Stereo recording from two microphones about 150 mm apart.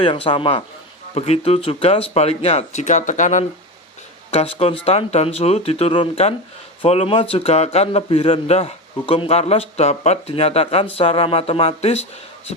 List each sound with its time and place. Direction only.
0.0 s a man's voice: 35° left (ahead or behind); by 3.4 s 55° left (ahead or behind)
4.5 s a man's voice: 40° left (ahead or behind)